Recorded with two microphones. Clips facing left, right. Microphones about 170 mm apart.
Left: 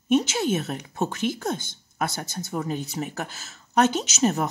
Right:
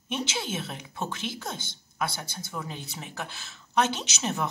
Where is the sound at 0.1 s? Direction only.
45° left (ahead or behind).